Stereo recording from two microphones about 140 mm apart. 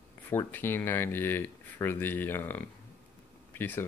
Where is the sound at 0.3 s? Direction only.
15° left (ahead or behind).